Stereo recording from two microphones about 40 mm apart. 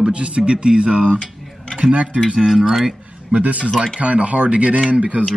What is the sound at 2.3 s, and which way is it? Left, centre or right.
Speech, centre.